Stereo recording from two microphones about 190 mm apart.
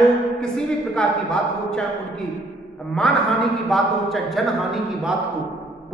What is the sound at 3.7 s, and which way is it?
A woman's voice, centre (ahead or behind).